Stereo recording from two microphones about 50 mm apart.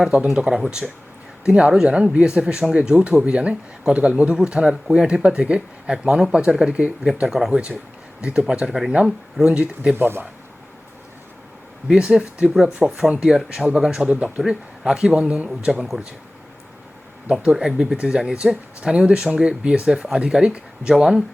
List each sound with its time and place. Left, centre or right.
0.3 s speech: centre
7.3 s speech: centre
7.5 s speech: right
9.9 s speech: right
11.9 s speech: centre
15.7 s speech: centre
17.2 s speech: centre